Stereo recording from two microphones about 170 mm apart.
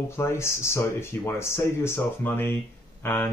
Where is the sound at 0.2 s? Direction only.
15° left (ahead or behind).